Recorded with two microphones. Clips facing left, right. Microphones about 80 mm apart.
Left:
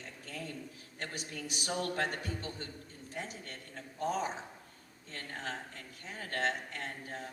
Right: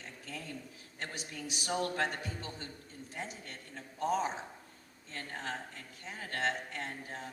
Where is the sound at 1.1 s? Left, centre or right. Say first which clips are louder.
Left 1 dB; left.